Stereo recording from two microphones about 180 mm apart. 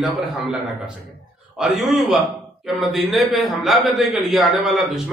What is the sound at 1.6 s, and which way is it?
Speech, centre (ahead or behind).